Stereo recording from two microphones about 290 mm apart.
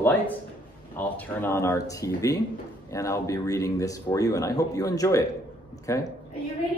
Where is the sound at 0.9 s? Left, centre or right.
Centre.